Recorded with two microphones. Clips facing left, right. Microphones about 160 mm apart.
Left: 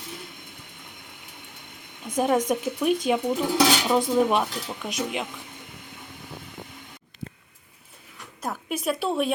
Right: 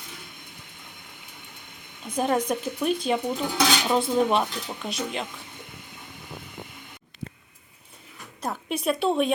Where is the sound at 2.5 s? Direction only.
15° left (ahead or behind).